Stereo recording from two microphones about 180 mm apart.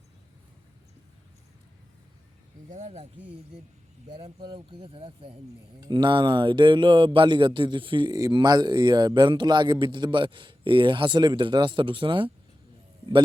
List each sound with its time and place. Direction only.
2.6 s speech: 40° right (ahead or behind)
4.4 s speech: 25° right (ahead or behind)